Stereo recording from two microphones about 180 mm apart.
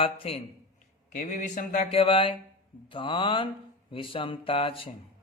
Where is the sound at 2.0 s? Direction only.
30° left (ahead or behind).